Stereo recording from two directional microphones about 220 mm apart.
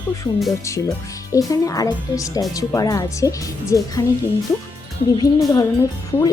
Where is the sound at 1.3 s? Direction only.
15° left (ahead or behind).